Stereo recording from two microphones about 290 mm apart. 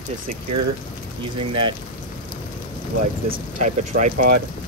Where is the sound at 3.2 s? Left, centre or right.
Right.